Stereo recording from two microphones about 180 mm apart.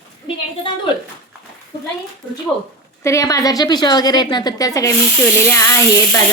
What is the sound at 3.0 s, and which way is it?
Speech, 15° left (ahead or behind).